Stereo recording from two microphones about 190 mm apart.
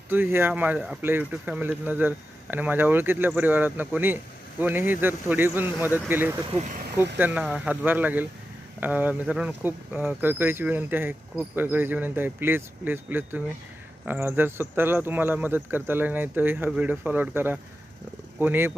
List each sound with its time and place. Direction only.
0.1 s speech: 10° right (ahead or behind)
6.6 s speech: 45° right (ahead or behind)
7.2 s speech: 10° right (ahead or behind)